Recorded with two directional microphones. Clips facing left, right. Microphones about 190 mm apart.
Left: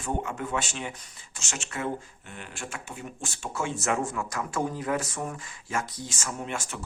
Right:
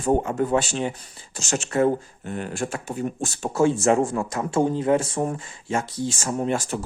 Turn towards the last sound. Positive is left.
turn(degrees=-35)  # may be behind; listen again after turning